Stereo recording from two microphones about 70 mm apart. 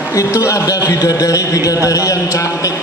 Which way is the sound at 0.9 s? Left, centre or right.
Left.